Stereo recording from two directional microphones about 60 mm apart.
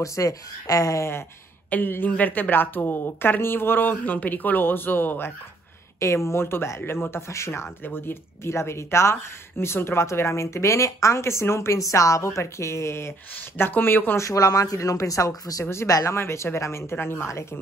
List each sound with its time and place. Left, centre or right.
0.0 s speech: left
1.7 s a woman's voice: left
5.9 s speech: left
7.8 s speech: left
13.6 s a woman's voice: left
14.1 s speech: left
16.1 s speech: left